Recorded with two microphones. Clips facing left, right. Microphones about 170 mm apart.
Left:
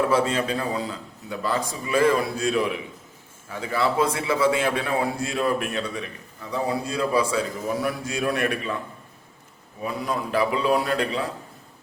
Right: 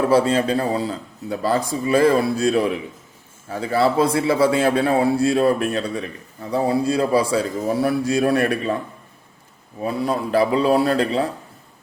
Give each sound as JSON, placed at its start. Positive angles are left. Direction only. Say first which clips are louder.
{"t": 0.1, "sound": "a man's voice", "louder": "right 5 dB", "side_deg": -35}
{"t": 9.8, "sound": "a man's voice", "louder": "right 5 dB", "side_deg": -35}